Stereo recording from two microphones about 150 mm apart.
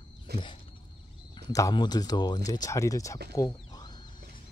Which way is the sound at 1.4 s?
25° left (ahead or behind).